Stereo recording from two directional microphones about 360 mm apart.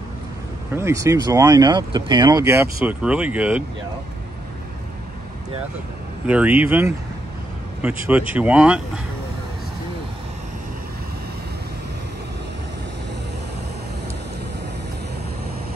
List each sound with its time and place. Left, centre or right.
0.7 s speech: centre
6.2 s speech: centre
8.3 s speech: centre